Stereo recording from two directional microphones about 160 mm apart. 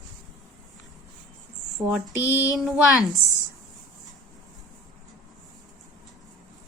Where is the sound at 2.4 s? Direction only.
5° right (ahead or behind).